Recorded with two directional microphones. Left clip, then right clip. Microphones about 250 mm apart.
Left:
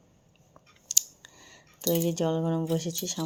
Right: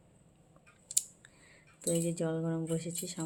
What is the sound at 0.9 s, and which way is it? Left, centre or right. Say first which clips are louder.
Speech: left 10 dB; centre.